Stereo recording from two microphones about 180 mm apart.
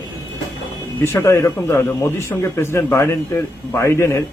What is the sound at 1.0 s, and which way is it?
A man's voice, 15° left (ahead or behind).